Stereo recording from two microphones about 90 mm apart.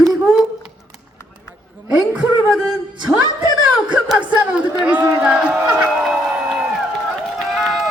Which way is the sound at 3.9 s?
10° right (ahead or behind).